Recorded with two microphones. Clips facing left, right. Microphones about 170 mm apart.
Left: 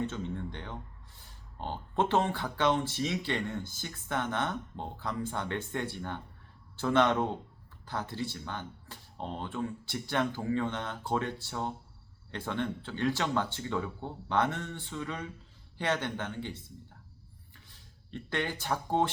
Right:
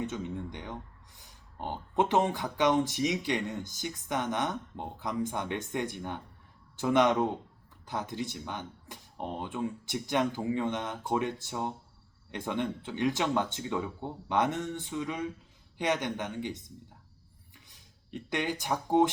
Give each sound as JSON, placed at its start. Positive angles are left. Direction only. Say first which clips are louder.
{"t": 0.0, "sound": "speech", "louder": "even", "side_deg": -15}
{"t": 17.5, "sound": "a sound", "louder": "right 2 dB", "side_deg": -15}
{"t": 18.6, "sound": "speech", "louder": "right 5 dB", "side_deg": -15}